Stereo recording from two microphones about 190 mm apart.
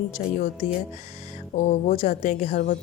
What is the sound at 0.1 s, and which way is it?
Speech, 40° left (ahead or behind).